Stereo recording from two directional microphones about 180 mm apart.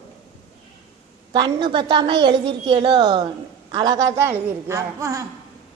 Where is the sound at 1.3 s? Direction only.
25° right (ahead or behind).